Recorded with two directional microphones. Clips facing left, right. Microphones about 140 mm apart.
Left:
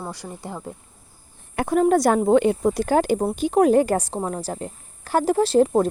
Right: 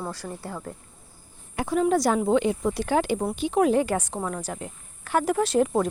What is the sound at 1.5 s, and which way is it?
Speech, 55° left (ahead or behind).